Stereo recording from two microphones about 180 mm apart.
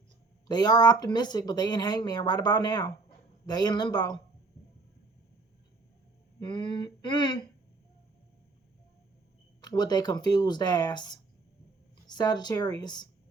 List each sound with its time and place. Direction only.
0.4 s speech: 20° left (ahead or behind)
6.4 s speech: 25° left (ahead or behind)
9.6 s speech: 20° left (ahead or behind)